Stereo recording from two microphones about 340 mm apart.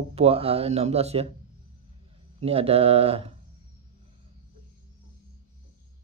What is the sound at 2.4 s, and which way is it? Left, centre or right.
Speech, centre.